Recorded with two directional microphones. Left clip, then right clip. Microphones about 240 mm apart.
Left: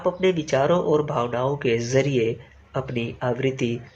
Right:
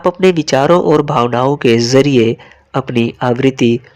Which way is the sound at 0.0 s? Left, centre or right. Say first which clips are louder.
Right 10 dB; right.